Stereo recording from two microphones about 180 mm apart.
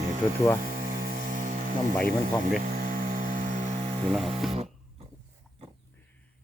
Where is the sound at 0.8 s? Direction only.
50° right (ahead or behind).